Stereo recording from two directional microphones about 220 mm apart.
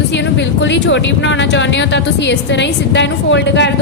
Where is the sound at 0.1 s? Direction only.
55° left (ahead or behind).